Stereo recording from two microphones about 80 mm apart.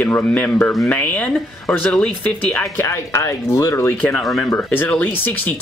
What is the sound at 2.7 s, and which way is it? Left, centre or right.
Speech, left.